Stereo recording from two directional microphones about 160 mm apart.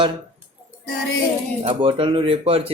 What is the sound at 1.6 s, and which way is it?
Speech, 35° right (ahead or behind).